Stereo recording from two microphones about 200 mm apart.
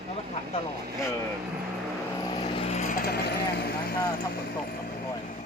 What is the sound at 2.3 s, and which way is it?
Vehicle, 25° left (ahead or behind).